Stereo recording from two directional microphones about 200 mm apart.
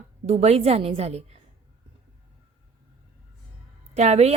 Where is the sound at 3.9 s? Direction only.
35° right (ahead or behind).